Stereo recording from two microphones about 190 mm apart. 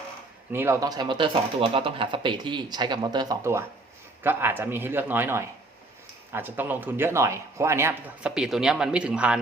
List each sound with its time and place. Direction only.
0.5 s speech: 15° right (ahead or behind)